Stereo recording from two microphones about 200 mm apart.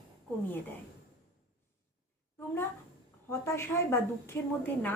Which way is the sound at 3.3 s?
10° left (ahead or behind).